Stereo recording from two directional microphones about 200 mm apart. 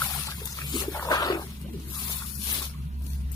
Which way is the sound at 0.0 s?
20° left (ahead or behind).